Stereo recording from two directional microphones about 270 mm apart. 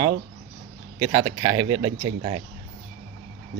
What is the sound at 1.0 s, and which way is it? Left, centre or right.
Speech, centre.